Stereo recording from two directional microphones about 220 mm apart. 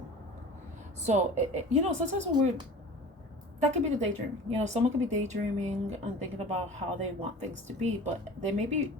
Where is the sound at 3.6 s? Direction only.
30° right (ahead or behind).